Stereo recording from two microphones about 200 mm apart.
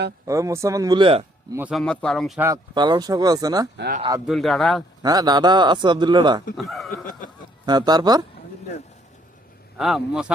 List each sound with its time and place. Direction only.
0.3 s speech: 15° right (ahead or behind)
1.5 s speech: 10° right (ahead or behind)
1.8 s a man's voice: 5° left (ahead or behind)
2.4 s a man's voice: 20° right (ahead or behind)
4.3 s a man's voice: centre (ahead or behind)
5.0 s a man's voice: 20° right (ahead or behind)
6.6 s a man's voice: centre (ahead or behind)
7.6 s a man's voice: 20° right (ahead or behind)
9.7 s a man's voice: centre (ahead or behind)